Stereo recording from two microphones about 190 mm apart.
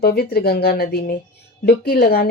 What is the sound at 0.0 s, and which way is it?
A woman's voice, 55° left (ahead or behind).